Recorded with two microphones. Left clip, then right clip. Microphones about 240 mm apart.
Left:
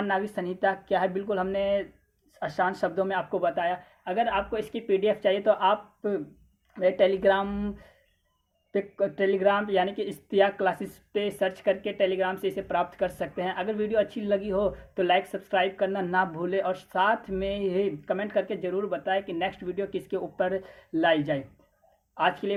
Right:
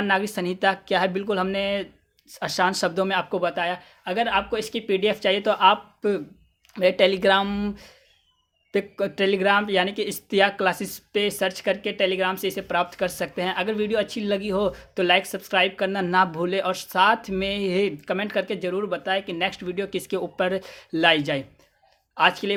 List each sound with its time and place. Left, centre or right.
0.0 s speech: right